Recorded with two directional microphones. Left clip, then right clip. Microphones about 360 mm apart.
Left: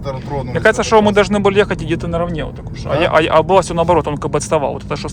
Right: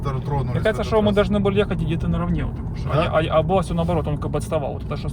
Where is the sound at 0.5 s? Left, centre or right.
Left.